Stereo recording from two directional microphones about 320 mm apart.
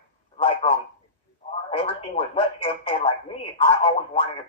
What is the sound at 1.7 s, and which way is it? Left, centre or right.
Speech, centre.